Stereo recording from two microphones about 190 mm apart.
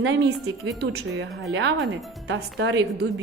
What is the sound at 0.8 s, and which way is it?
A woman's voice, 65° right (ahead or behind).